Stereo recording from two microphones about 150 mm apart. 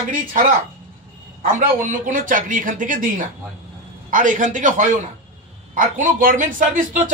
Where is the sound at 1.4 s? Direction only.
60° right (ahead or behind).